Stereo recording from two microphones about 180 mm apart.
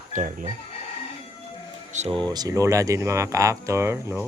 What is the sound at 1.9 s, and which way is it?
Speech, 30° right (ahead or behind).